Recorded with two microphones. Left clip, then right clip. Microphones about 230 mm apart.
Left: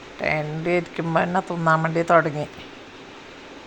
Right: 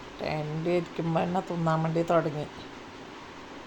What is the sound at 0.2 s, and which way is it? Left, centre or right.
Speech, centre.